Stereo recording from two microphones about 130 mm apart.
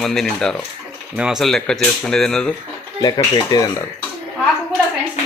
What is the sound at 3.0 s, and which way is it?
Speech, 30° left (ahead or behind).